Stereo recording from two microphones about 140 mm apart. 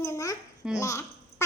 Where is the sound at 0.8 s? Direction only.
20° left (ahead or behind).